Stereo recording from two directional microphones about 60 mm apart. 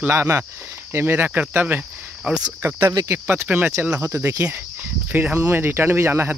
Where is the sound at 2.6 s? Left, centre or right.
Right.